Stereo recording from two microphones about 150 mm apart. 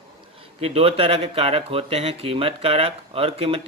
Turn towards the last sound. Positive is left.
turn(degrees=-40)  # may be behind; listen again after turning